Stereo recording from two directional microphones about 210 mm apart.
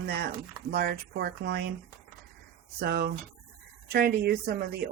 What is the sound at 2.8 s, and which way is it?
Speech, 50° right (ahead or behind).